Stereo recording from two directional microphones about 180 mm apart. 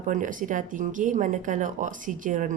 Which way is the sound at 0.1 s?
45° right (ahead or behind).